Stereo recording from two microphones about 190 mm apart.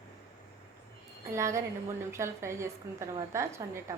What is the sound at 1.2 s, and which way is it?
A woman's voice, 15° right (ahead or behind).